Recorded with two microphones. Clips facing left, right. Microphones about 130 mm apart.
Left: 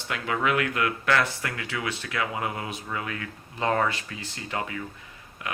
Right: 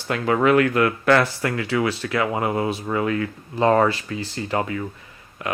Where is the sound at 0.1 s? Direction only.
40° right (ahead or behind).